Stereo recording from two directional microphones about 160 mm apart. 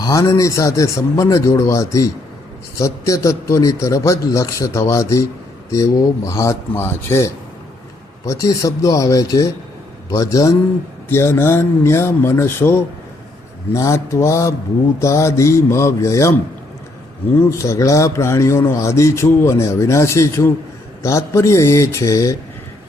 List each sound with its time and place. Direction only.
0.0 s a man's voice: 20° left (ahead or behind)
17.5 s a man's voice: 20° left (ahead or behind)